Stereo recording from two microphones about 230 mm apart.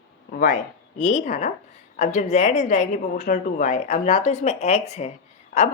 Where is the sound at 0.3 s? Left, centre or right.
Left.